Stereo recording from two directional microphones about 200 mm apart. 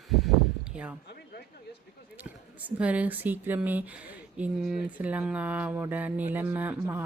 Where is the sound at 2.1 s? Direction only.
5° right (ahead or behind).